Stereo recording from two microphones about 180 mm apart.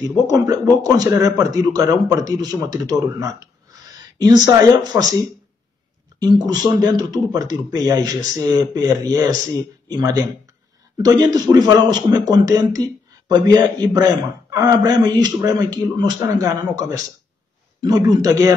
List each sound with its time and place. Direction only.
0.3 s a man's voice: 20° right (ahead or behind)
6.1 s a man's voice: 20° right (ahead or behind)